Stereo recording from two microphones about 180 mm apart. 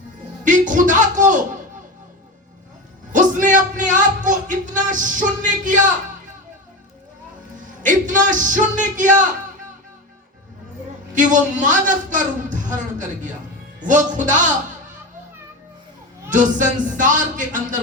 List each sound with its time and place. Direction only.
0.4 s music: 45° right (ahead or behind)
3.1 s speech: 45° right (ahead or behind)
7.8 s a man's voice: 45° right (ahead or behind)
11.1 s a man's voice: 45° right (ahead or behind)
16.3 s a man's voice: 45° right (ahead or behind)